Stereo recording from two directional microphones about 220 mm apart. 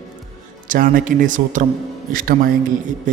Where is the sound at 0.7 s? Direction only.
40° right (ahead or behind).